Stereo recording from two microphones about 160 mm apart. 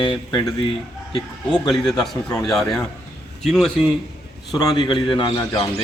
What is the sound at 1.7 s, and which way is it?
A man's voice, centre (ahead or behind).